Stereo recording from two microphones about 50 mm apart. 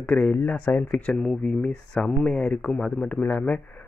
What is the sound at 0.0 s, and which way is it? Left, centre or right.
Speech, left.